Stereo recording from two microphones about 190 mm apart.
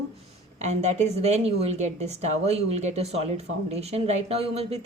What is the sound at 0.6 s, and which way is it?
A woman's voice, 35° right (ahead or behind).